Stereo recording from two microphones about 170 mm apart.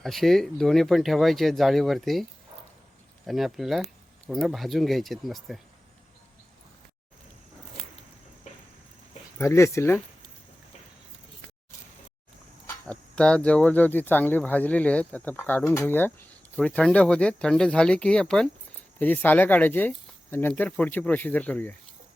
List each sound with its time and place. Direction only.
0.0 s speech: centre (ahead or behind)
3.2 s speech: centre (ahead or behind)
9.4 s speech: 15° left (ahead or behind)
12.6 s speech: 5° left (ahead or behind)